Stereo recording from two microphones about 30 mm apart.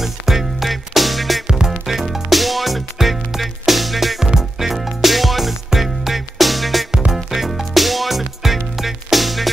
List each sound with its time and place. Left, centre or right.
0.0 s music: centre
1.5 s music: right
1.9 s music: centre